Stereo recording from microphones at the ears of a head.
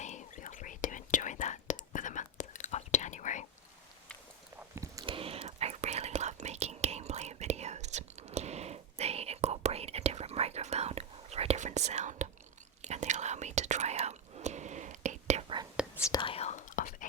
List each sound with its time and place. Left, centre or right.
0.0 s whispering: left
4.9 s whispering: right
16.2 s whispering: left